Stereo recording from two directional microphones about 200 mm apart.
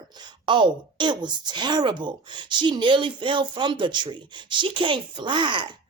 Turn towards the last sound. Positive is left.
turn(degrees=-25)  # may be behind; listen again after turning